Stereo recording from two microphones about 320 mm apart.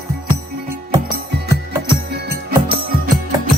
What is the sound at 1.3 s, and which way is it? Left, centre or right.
Music, right.